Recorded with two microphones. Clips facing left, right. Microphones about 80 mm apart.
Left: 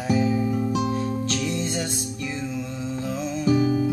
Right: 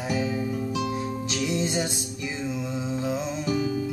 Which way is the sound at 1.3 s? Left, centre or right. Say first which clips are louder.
Even; centre.